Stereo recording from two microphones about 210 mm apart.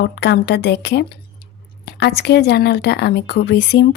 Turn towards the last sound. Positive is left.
turn(degrees=55)  # may be behind; listen again after turning